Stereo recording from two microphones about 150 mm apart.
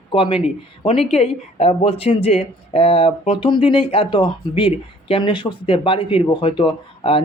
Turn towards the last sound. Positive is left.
turn(degrees=35)  # may be behind; listen again after turning